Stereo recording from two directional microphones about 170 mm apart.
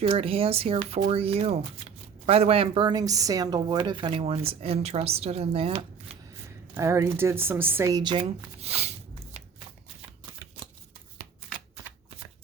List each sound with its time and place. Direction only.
0.0 s speech: 35° right (ahead or behind)
6.7 s speech: 15° right (ahead or behind); by 9.4 s 40° right (ahead or behind)